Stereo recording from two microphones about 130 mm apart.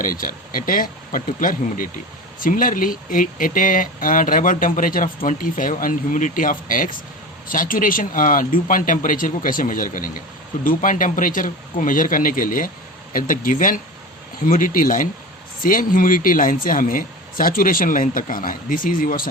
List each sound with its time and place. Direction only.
0.0 s speech: 90° left